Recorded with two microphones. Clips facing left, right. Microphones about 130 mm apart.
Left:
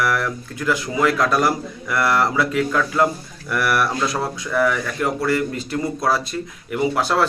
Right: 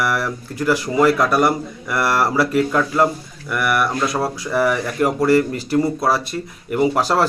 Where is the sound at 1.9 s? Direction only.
30° right (ahead or behind).